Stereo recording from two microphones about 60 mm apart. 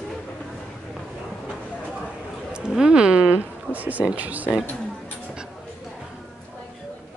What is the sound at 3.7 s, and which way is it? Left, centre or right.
Speech, right.